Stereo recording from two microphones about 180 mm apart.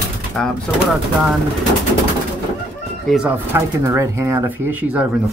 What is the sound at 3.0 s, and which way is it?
Speech, 5° right (ahead or behind).